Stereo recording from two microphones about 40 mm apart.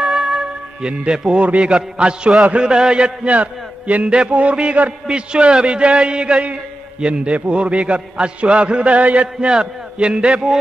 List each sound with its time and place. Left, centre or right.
0.0 s music: centre
1.3 s a man's voice: right
9.5 s a man's voice: right